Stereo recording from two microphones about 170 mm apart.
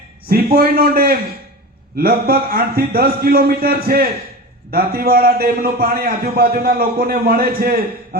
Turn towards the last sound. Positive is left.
turn(degrees=-60)  # may be behind; listen again after turning